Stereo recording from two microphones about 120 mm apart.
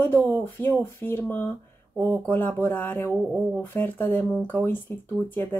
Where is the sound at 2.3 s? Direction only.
15° left (ahead or behind).